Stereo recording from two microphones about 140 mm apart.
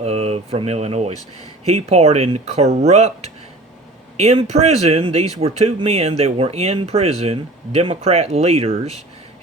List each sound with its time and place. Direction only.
0.0 s speech: 50° right (ahead or behind)